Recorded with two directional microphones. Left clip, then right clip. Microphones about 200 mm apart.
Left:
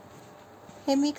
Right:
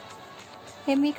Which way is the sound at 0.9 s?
15° right (ahead or behind).